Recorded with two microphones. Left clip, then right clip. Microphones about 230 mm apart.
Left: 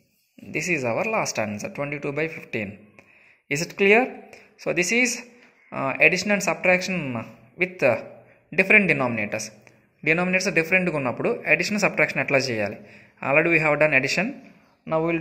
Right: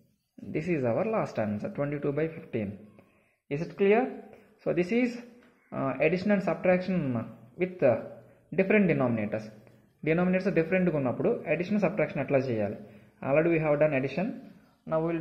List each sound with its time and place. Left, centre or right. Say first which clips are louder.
0.5 s a man's voice: left 5 dB; centre
3.5 s speech: left 7 dB; left
4.3 s a man's voice: left 4 dB; centre
14.9 s speech: left 6 dB; left